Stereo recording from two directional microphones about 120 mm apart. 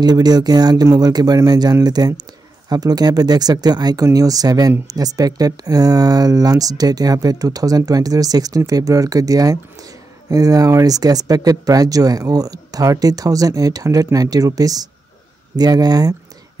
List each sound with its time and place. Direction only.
0.0 s speech: 35° right (ahead or behind)